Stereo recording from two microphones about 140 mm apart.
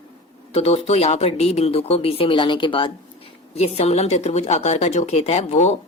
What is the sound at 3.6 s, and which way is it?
Speech, 50° left (ahead or behind).